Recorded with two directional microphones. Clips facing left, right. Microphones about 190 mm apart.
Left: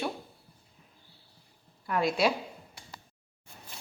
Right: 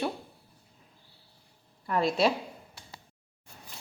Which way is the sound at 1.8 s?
Centre (ahead or behind).